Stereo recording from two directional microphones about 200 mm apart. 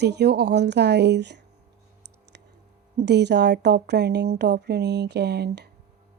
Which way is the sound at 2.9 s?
55° right (ahead or behind).